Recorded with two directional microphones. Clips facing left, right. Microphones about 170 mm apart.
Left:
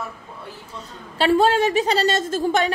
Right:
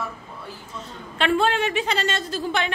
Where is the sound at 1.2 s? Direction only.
35° left (ahead or behind).